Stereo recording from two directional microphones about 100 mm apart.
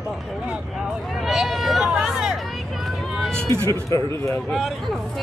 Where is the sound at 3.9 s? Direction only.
30° left (ahead or behind).